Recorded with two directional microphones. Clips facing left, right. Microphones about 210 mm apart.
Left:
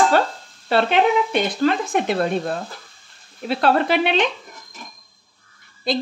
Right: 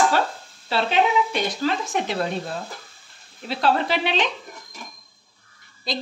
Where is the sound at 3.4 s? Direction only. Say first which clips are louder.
Left 4 dB; 55° left (ahead or behind).